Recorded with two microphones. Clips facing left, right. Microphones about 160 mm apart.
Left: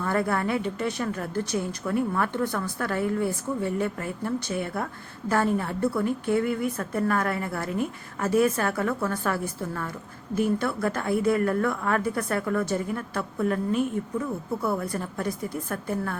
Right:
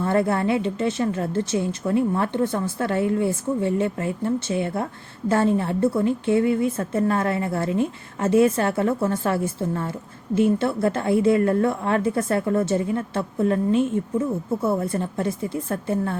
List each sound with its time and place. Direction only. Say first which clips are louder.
0.0 s a woman's voice: right 5 dB; 25° right (ahead or behind)